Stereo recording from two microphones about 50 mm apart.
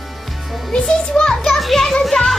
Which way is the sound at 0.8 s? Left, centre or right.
Centre.